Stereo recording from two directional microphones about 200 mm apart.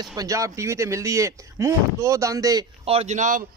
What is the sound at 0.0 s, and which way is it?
Speech, 20° right (ahead or behind).